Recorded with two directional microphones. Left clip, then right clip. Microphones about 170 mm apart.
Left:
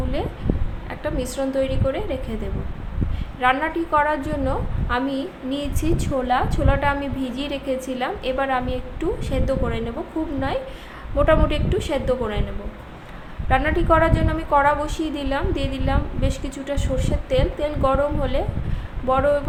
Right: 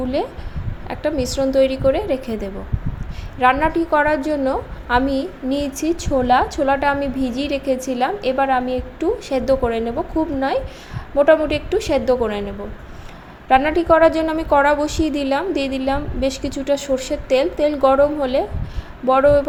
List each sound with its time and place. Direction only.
0.9 s a woman's voice: 35° right (ahead or behind)
3.4 s a woman's voice: 35° right (ahead or behind)
13.5 s a woman's voice: 30° right (ahead or behind)